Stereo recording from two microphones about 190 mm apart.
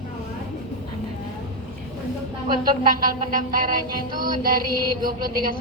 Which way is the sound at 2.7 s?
50° right (ahead or behind).